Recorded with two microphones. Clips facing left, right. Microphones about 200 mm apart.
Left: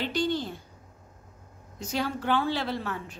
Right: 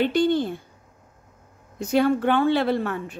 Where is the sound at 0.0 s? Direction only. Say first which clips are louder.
Right 8 dB; 55° right (ahead or behind).